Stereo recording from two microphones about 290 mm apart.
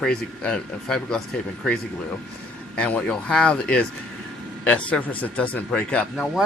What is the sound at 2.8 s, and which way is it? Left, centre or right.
Speech, centre.